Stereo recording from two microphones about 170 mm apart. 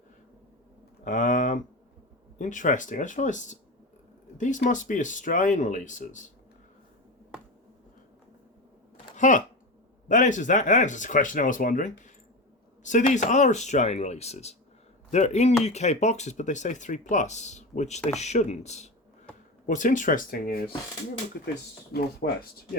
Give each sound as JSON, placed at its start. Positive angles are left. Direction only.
{"t": 1.0, "sound": "speech", "side_deg": 50}
{"t": 9.1, "sound": "speech", "side_deg": 45}
{"t": 21.9, "sound": "speech", "side_deg": 65}